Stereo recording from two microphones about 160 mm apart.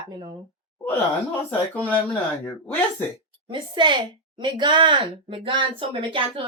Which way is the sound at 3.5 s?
30° right (ahead or behind).